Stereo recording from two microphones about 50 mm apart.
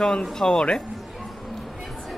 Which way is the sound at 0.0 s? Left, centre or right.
Centre.